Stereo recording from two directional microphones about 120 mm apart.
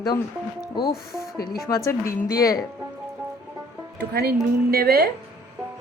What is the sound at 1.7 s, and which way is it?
Speech, 25° left (ahead or behind).